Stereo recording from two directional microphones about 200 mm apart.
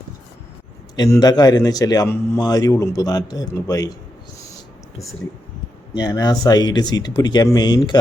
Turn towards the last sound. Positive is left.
turn(degrees=20)  # may be behind; listen again after turning